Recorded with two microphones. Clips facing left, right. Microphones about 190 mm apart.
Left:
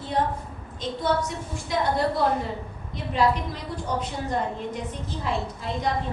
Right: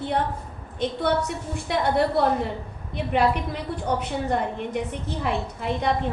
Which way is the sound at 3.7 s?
60° right (ahead or behind).